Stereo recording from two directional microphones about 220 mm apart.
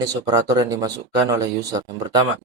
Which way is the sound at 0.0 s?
15° right (ahead or behind).